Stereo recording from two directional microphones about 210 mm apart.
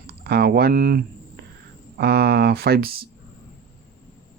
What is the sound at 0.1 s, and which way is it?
Speech, 50° right (ahead or behind).